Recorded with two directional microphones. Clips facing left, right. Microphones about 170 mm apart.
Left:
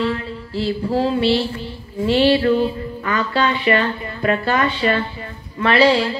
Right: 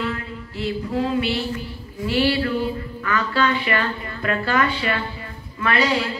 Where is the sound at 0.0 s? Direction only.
30° left (ahead or behind).